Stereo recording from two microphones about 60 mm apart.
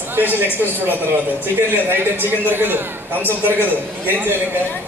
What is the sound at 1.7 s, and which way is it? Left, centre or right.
A man's voice, right.